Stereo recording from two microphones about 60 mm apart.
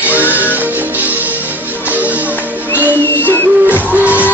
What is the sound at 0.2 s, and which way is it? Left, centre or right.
Music, left.